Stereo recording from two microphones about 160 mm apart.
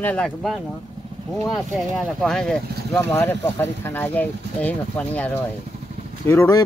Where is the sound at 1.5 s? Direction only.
Centre (ahead or behind).